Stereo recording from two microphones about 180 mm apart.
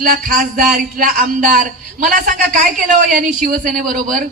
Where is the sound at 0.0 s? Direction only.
50° right (ahead or behind).